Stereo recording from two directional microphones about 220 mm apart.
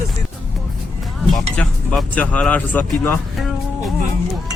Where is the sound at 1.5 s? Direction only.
5° left (ahead or behind).